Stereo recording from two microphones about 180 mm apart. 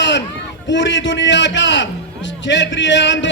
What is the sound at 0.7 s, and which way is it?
A man's voice, 90° left.